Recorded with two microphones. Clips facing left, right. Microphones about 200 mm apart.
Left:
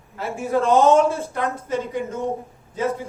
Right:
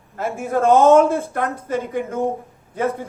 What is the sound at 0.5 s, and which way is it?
Speech, 50° right (ahead or behind).